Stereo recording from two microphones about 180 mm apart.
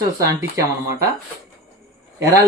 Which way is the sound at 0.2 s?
20° right (ahead or behind).